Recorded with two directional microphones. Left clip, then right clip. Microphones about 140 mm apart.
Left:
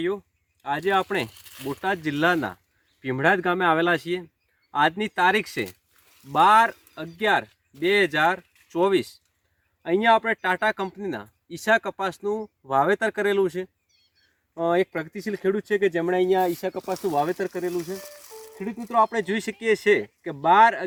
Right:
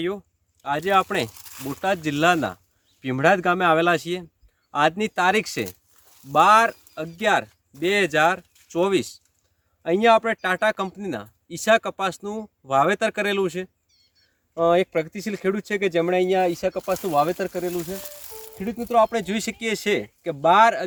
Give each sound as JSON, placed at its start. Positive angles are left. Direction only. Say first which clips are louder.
{"t": 0.6, "sound": "speech", "louder": "right 3 dB", "side_deg": -35}
{"t": 1.8, "sound": "speech", "louder": "right 3 dB", "side_deg": -40}
{"t": 17.7, "sound": "speech", "louder": "even", "side_deg": -15}
{"t": 18.6, "sound": "speech", "louder": "right 2 dB", "side_deg": -45}